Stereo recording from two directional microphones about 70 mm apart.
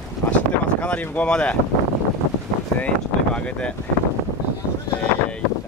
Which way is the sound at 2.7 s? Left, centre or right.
Centre.